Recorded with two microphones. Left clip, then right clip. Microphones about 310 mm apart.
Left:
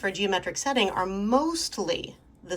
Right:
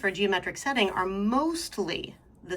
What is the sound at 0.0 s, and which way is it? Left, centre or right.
Speech, centre.